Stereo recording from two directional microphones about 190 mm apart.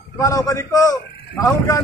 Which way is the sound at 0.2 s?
15° left (ahead or behind).